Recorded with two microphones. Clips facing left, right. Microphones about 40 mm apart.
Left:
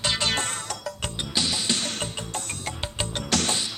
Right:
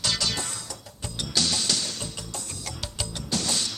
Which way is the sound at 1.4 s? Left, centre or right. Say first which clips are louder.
Even; centre.